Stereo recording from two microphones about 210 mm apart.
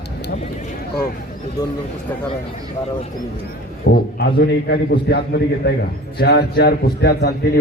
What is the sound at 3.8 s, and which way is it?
A man's voice, 45° left (ahead or behind).